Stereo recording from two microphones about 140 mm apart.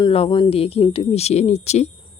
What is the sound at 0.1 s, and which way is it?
Speech, 40° left (ahead or behind).